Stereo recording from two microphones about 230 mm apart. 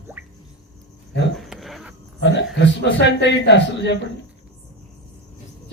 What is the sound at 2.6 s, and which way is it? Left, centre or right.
A man's voice, left.